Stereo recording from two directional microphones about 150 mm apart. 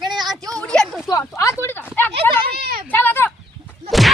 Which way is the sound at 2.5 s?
90° right.